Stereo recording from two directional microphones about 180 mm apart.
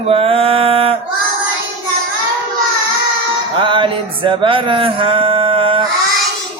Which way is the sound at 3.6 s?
25° right (ahead or behind).